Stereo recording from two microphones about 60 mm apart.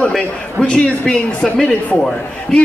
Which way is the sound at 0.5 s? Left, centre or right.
Centre.